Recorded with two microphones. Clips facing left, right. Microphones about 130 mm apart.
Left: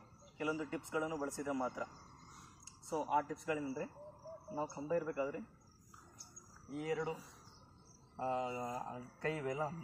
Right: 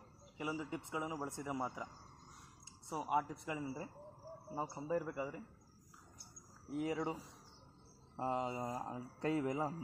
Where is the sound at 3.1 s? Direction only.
15° right (ahead or behind).